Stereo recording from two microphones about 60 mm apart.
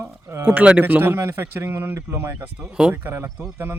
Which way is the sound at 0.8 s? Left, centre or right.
Right.